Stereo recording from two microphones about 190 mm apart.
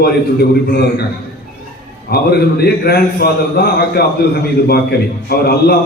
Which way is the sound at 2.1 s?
55° left (ahead or behind).